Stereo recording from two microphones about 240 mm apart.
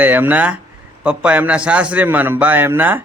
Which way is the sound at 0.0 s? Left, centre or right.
Centre.